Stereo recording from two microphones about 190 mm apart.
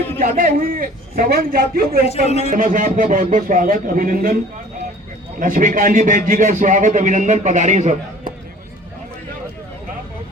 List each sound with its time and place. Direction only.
0.2 s a man's voice: 50° right (ahead or behind)
2.0 s a man's voice: 35° left (ahead or behind)
2.5 s a man's voice: 45° right (ahead or behind)
5.4 s a man's voice: 45° right (ahead or behind)